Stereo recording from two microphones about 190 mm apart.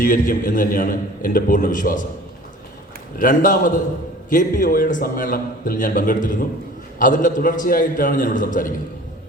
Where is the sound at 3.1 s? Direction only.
45° left (ahead or behind).